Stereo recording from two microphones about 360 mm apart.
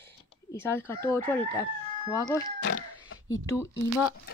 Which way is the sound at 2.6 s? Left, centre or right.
Left.